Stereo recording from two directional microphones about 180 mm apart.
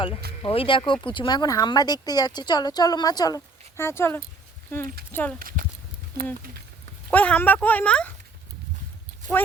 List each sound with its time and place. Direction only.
0.4 s speech: 30° left (ahead or behind); by 5.4 s 10° left (ahead or behind)
5.4 s speech: 50° right (ahead or behind)
7.1 s speech: 10° left (ahead or behind)